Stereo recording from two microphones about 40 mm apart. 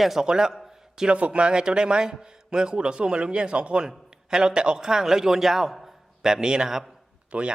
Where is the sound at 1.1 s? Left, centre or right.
Right; by 5.9 s centre.